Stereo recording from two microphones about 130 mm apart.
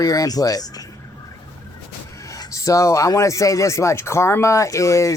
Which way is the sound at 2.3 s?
25° left (ahead or behind).